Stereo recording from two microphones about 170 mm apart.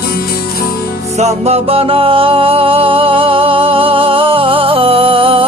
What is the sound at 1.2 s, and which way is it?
Music, 40° right (ahead or behind).